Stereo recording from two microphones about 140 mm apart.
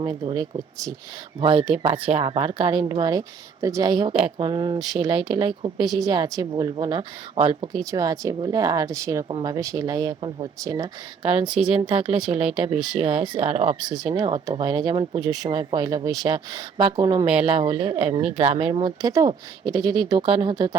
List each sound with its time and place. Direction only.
0.0 s speech: 30° right (ahead or behind)
1.4 s speech: 35° right (ahead or behind)
11.2 s speech: 45° right (ahead or behind)
11.4 s speech: 10° right (ahead or behind)
12.5 s speech: 35° right (ahead or behind)
13.7 s speech: 5° right (ahead or behind)
14.1 s speech: 30° right (ahead or behind)